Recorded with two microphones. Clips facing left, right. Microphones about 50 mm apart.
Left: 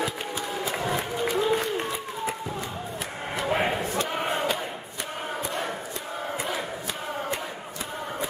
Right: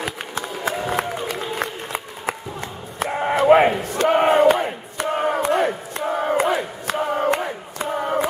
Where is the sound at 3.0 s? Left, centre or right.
Right.